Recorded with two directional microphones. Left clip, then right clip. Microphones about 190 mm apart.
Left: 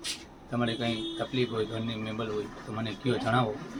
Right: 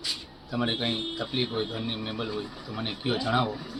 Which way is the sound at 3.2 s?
Centre (ahead or behind).